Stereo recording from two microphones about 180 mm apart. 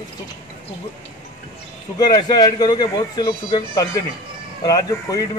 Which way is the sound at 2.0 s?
20° left (ahead or behind).